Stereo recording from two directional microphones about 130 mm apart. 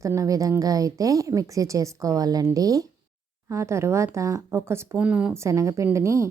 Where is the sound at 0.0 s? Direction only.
25° right (ahead or behind).